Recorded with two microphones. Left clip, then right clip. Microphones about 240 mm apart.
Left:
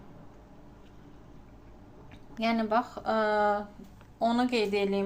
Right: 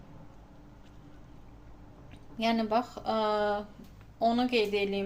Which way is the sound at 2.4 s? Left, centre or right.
Centre.